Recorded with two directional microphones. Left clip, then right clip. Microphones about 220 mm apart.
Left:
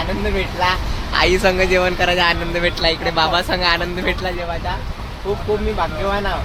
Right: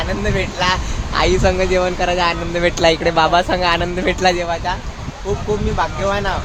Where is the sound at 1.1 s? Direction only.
10° right (ahead or behind).